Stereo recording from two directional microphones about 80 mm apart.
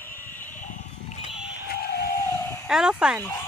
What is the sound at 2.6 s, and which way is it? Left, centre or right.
Speech, centre.